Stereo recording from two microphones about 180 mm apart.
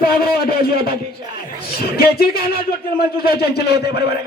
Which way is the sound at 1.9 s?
60° left (ahead or behind).